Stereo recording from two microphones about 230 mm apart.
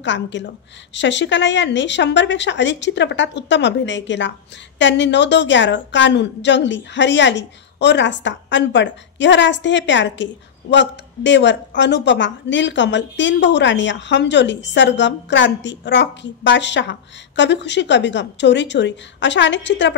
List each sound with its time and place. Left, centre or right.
0.0 s a woman's voice: left